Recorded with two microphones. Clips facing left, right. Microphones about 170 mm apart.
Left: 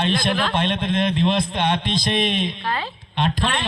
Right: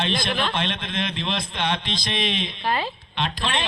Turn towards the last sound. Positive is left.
turn(degrees=50)  # may be behind; listen again after turning